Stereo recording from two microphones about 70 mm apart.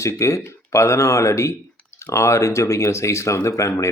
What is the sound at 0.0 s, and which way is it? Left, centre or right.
Speech, left.